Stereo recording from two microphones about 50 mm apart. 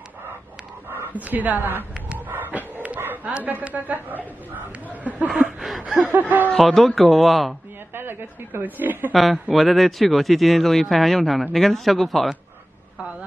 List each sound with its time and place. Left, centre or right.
0.8 s dog: right
1.2 s a woman's voice: right
2.1 s dog: right
3.3 s a woman's voice: right
6.5 s speech: centre
7.9 s a woman's voice: right
9.1 s speech: centre